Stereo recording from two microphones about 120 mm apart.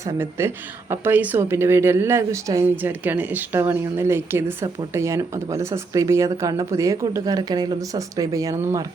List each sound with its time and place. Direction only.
0.0 s a woman's voice: 20° right (ahead or behind)